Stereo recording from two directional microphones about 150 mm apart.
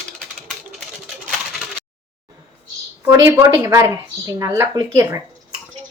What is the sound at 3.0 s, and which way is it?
A woman's voice, 20° right (ahead or behind).